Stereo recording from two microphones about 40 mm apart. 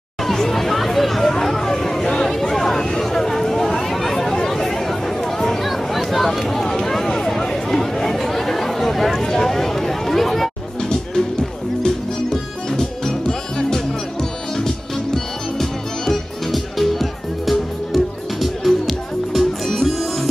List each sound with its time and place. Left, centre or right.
0.2 s chatter: centre
10.8 s music: centre
15.6 s music: centre